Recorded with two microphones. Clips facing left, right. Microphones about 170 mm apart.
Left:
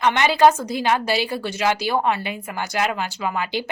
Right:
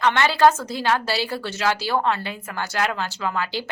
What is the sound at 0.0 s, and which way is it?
A woman's voice, 15° left (ahead or behind).